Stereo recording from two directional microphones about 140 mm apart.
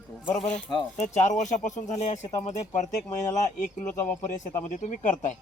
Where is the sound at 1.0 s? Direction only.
55° left (ahead or behind).